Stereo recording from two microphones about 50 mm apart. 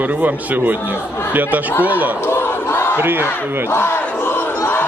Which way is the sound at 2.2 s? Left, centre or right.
Left.